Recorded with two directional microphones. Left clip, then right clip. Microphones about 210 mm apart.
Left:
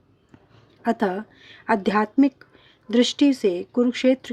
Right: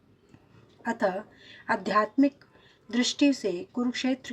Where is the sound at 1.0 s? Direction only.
45° left (ahead or behind).